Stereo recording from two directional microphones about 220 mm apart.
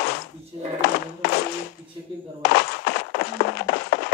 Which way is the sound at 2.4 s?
45° left (ahead or behind).